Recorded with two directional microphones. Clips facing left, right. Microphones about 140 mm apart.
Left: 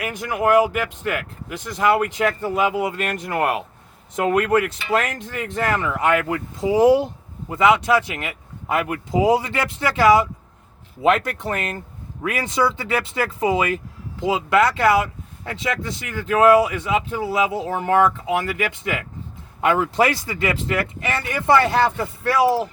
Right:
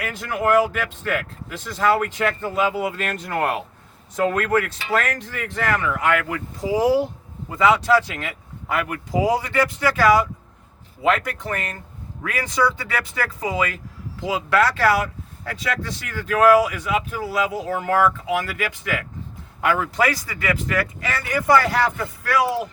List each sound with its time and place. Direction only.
0.0 s speech: 15° left (ahead or behind)